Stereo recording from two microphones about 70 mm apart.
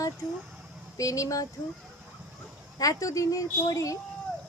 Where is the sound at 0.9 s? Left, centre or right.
Left.